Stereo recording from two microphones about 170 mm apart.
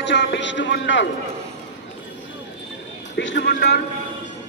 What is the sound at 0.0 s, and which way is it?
A man's voice, 90° left.